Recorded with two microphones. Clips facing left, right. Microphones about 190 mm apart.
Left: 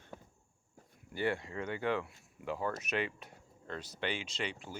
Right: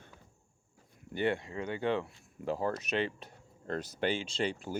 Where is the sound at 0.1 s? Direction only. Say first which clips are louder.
Left 8 dB; 45° left (ahead or behind).